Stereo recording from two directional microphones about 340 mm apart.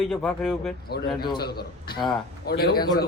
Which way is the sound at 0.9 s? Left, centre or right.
Left.